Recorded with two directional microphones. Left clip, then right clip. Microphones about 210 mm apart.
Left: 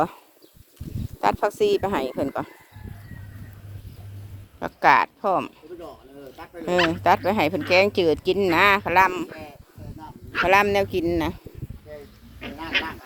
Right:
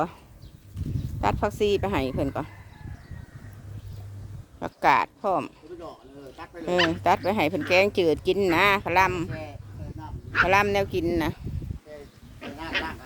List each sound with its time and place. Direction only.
1.2 s speech: 20° left (ahead or behind); by 2.5 s centre (ahead or behind)
4.6 s speech: centre (ahead or behind)
6.3 s speech: 15° left (ahead or behind)
7.0 s speech: centre (ahead or behind)
12.4 s a sound: centre (ahead or behind)